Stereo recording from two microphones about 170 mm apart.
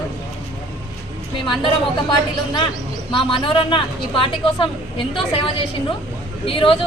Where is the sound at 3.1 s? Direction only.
30° left (ahead or behind).